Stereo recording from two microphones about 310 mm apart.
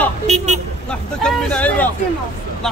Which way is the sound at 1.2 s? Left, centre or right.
Centre.